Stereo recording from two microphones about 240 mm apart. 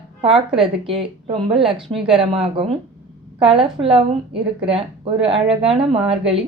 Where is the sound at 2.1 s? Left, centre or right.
Right.